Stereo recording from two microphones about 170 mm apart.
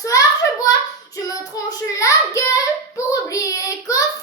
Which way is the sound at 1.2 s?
20° left (ahead or behind).